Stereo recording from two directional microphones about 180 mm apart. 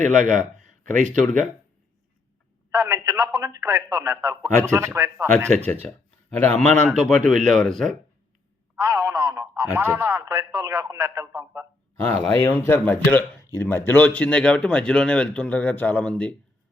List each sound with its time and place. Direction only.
0.0 s speech: 40° right (ahead or behind)
2.7 s a man's voice: 15° right (ahead or behind)
5.5 s a man's voice: 10° left (ahead or behind)
8.8 s radio: 20° right (ahead or behind)
10.7 s a man's voice: 15° right (ahead or behind)
11.9 s speech: 10° left (ahead or behind)